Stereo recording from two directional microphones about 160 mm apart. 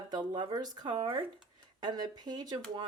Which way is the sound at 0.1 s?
25° right (ahead or behind).